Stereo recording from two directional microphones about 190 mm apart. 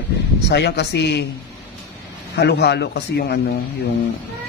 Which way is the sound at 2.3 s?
60° left (ahead or behind).